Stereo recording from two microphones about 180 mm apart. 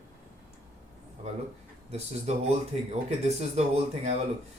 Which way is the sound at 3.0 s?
35° right (ahead or behind).